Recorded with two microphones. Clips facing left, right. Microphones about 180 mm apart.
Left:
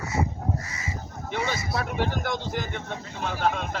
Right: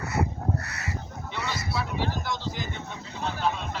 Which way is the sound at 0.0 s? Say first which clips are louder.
Even; 65° right (ahead or behind).